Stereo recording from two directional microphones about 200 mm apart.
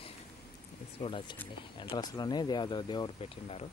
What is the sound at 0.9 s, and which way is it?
Speech, 25° left (ahead or behind).